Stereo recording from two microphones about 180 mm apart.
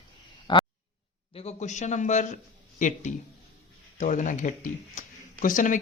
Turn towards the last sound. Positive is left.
turn(degrees=45)  # may be behind; listen again after turning